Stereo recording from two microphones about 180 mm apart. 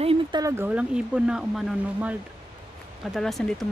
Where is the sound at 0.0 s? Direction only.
30° right (ahead or behind).